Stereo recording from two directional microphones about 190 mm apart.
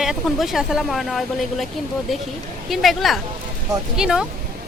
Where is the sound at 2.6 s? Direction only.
Centre (ahead or behind).